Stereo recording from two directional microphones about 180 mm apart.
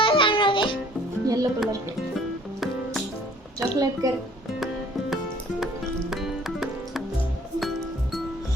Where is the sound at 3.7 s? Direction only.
20° right (ahead or behind).